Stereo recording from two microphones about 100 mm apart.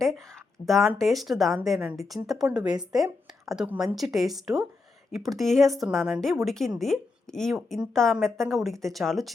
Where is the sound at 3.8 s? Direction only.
Centre (ahead or behind).